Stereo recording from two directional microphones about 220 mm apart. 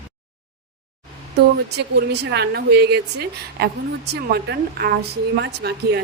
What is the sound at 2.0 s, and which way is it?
A woman's voice, 50° right (ahead or behind).